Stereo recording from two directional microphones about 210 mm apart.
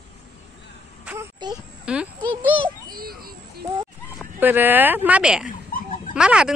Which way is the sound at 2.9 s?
45° right (ahead or behind).